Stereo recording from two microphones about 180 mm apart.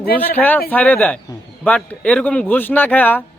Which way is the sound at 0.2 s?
10° left (ahead or behind).